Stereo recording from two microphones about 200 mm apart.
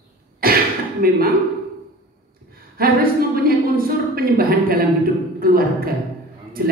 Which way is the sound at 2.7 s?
45° right (ahead or behind).